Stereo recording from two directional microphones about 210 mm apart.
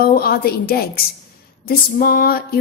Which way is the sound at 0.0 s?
45° left (ahead or behind).